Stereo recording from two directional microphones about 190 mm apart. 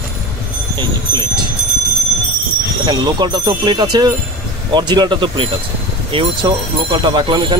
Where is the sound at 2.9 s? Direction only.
20° right (ahead or behind).